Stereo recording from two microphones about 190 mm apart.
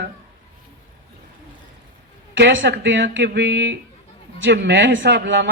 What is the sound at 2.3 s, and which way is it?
A man's voice, 80° right.